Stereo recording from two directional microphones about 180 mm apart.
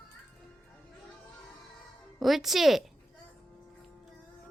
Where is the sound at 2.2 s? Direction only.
Centre (ahead or behind).